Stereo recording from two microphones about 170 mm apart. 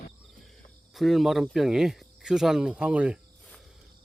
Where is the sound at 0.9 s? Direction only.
Centre (ahead or behind).